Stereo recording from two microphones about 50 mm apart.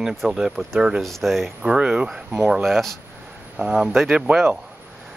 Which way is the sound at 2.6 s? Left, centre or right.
Centre.